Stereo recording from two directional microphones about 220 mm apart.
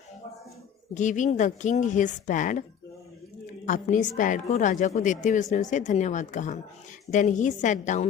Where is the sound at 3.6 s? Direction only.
35° left (ahead or behind).